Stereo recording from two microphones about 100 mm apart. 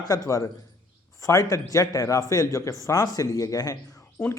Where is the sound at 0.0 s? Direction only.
35° left (ahead or behind).